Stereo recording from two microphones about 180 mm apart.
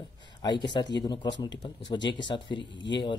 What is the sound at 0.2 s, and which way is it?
Speech, 25° left (ahead or behind).